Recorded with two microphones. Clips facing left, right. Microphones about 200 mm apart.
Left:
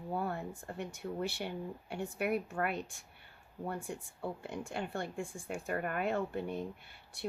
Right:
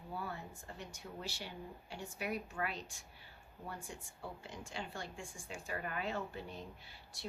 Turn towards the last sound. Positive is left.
turn(degrees=55)  # may be behind; listen again after turning